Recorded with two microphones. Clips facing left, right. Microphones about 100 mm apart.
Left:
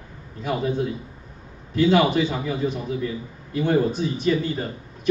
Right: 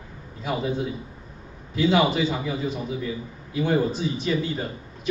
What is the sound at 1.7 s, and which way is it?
A man's voice, centre (ahead or behind).